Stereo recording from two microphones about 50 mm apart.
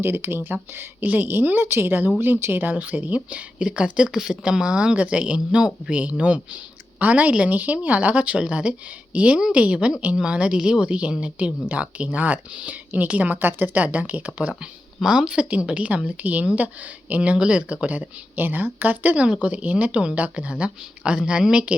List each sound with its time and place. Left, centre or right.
0.0 s speech: right
0.4 s a woman's voice: right
15.0 s a woman's voice: centre